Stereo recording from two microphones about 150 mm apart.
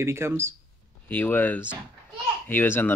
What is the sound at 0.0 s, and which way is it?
Speech, 15° right (ahead or behind).